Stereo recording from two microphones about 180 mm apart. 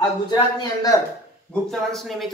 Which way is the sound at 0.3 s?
20° left (ahead or behind).